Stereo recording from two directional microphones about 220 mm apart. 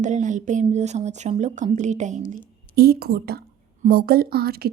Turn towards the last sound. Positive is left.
turn(degrees=-45)  # may be behind; listen again after turning